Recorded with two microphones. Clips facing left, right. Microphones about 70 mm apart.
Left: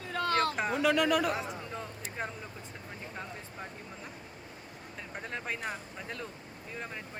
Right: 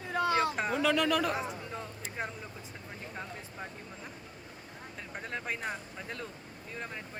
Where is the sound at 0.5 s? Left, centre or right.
Centre.